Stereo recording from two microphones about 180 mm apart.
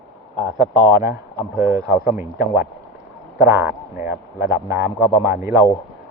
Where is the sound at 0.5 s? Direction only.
20° right (ahead or behind).